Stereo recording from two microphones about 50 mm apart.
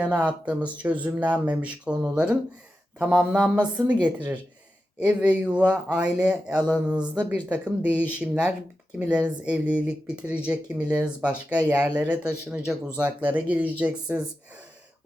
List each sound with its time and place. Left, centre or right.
0.0 s speech: right